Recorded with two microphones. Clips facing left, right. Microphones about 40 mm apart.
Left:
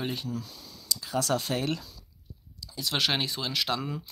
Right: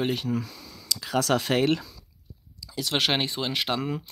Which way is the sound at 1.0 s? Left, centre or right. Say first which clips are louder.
Right 5 dB; right.